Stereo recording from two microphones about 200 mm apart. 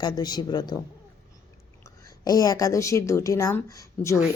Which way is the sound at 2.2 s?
20° left (ahead or behind).